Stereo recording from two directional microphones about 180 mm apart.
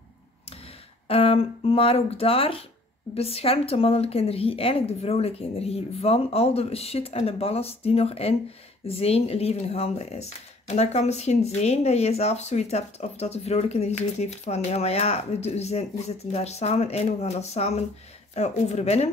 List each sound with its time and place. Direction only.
1.0 s speech: 30° left (ahead or behind)